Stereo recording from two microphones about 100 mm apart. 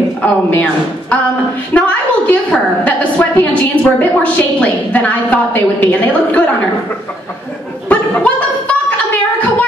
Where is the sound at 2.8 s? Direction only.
15° left (ahead or behind).